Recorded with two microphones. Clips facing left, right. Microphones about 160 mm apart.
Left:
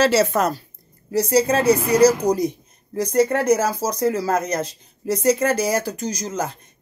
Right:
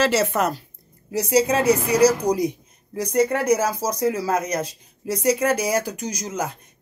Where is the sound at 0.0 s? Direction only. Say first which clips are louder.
Left 3 dB; 40° left (ahead or behind).